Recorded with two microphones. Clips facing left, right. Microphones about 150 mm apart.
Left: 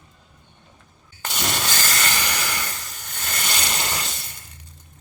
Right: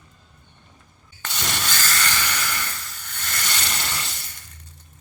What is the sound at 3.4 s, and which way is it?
Ratchet, 15° left (ahead or behind).